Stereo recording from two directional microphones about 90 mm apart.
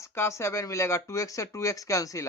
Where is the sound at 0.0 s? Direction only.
30° left (ahead or behind).